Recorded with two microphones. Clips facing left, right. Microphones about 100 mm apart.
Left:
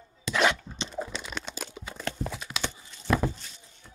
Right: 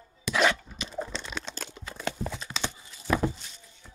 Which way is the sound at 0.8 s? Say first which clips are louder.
Even; 5° left (ahead or behind).